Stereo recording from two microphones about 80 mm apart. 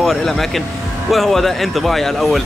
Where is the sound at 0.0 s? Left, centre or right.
Centre.